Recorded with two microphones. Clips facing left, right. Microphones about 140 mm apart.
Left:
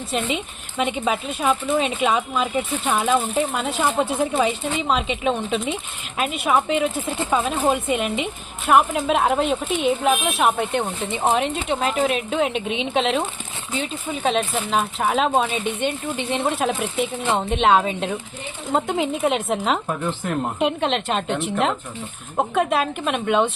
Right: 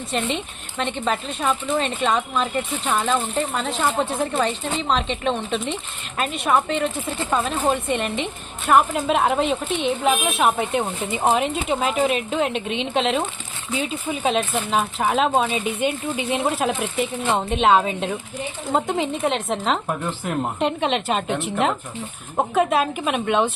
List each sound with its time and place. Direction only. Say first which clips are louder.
0.1 s speech: even; 5° left (ahead or behind)